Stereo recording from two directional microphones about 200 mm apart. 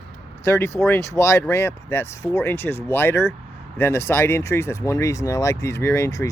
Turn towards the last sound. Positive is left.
turn(degrees=15)  # may be behind; listen again after turning